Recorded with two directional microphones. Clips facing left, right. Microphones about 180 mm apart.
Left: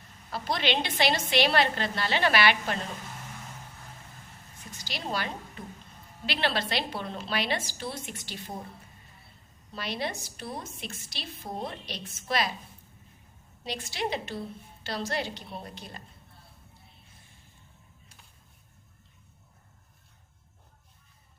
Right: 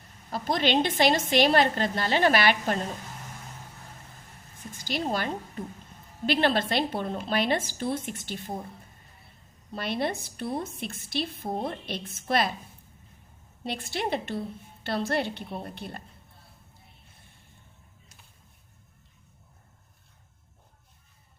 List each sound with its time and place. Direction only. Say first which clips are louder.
0.3 s a woman's voice: right 3 dB; 45° right (ahead or behind)
4.7 s a woman's voice: right 5 dB; 50° right (ahead or behind)
9.7 s a woman's voice: right 4 dB; 55° right (ahead or behind)
13.7 s a woman's voice: right 2 dB; 55° right (ahead or behind)